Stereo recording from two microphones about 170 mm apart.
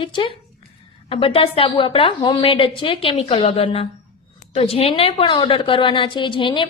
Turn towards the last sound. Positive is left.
turn(degrees=30)  # may be behind; listen again after turning